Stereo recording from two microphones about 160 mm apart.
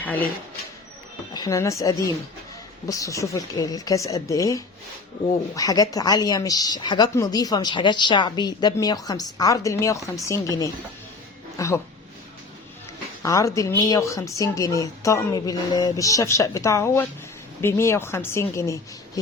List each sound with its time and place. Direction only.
0.0 s speech: 10° left (ahead or behind)
1.3 s a woman's voice: 25° left (ahead or behind)
13.2 s a woman's voice: 20° left (ahead or behind)